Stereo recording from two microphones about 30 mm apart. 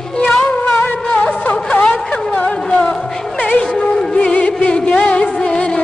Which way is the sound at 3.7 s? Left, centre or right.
Centre.